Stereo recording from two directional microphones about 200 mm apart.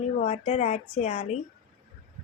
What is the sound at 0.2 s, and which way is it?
Speech, 35° left (ahead or behind).